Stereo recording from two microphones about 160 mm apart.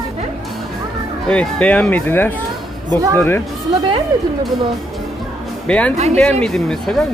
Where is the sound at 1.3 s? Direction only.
5° left (ahead or behind).